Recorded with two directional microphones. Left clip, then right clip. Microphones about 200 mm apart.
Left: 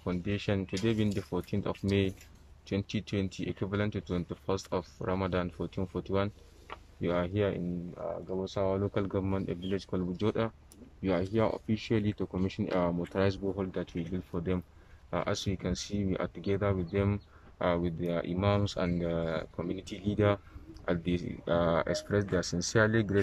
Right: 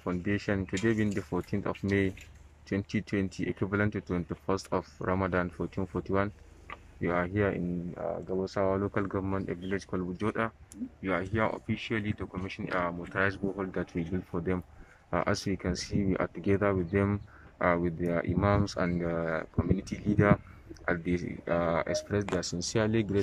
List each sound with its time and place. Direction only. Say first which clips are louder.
0.0 s speech: right 2 dB; centre (ahead or behind)
12.0 s speech: left 3 dB; 25° left (ahead or behind)
14.1 s speech: right 1 dB; centre (ahead or behind)